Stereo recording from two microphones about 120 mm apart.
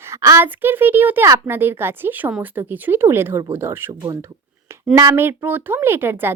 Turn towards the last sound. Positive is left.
turn(degrees=-20)  # may be behind; listen again after turning